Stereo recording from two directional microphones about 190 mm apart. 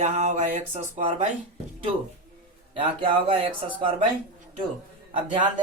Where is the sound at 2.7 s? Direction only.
25° right (ahead or behind).